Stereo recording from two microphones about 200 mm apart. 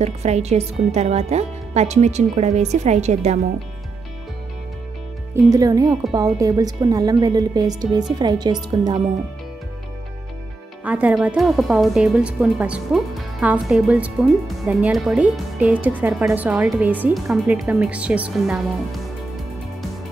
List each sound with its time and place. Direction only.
0.0 s a woman's voice: 35° right (ahead or behind)
5.5 s speech: 20° right (ahead or behind)
10.8 s a woman's voice: 5° right (ahead or behind)